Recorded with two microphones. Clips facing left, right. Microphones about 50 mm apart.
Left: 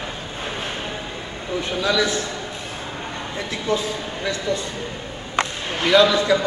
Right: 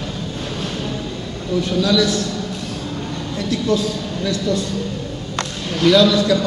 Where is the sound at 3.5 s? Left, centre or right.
Left.